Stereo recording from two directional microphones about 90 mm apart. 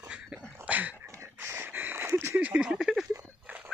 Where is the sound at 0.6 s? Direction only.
20° right (ahead or behind).